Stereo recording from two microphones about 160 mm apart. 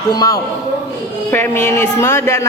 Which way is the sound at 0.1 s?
25° left (ahead or behind).